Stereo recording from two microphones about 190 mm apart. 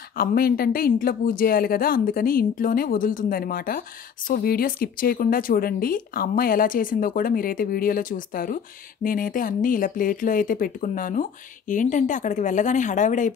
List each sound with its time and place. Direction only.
0.2 s speech: 50° left (ahead or behind)